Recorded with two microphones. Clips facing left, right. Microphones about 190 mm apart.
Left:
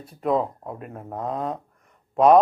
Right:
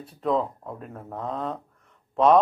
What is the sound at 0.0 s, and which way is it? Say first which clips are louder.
Speech: left 2 dB; 10° left (ahead or behind).